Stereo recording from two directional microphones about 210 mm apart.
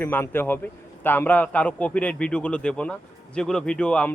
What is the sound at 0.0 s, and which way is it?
A man's voice, 10° left (ahead or behind).